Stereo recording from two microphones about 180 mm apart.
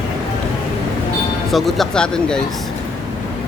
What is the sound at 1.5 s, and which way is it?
Speech, centre (ahead or behind).